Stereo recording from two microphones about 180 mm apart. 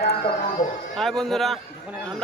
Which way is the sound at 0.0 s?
60° left (ahead or behind).